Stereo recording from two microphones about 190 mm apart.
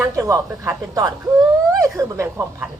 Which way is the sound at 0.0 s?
15° right (ahead or behind).